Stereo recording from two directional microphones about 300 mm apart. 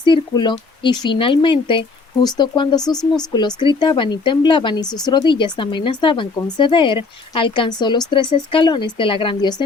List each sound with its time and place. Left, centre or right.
0.0 s speech: centre
2.9 s speech: centre
3.3 s speech: centre